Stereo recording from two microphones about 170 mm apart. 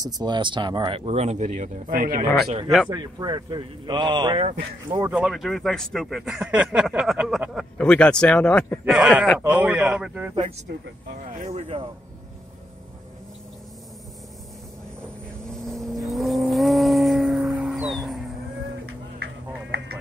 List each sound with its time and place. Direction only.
0.0 s speech: 25° right (ahead or behind); by 2.5 s 60° right (ahead or behind)
2.9 s a man's voice: 25° right (ahead or behind)
5.1 s a man's voice: centre (ahead or behind)
11.2 s speech: 45° right (ahead or behind)
15.6 s vehicle: centre (ahead or behind)